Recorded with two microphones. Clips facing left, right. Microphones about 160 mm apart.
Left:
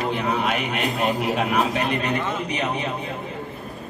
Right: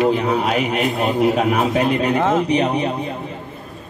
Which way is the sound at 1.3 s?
45° right (ahead or behind).